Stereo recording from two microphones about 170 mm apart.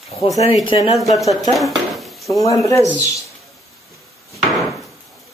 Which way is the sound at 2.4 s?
20° left (ahead or behind).